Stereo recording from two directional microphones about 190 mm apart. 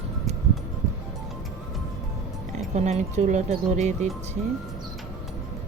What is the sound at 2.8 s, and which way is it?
Speech, 35° right (ahead or behind).